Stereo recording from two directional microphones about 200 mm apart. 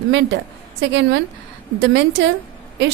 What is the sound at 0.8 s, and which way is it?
A woman's voice, 60° right (ahead or behind).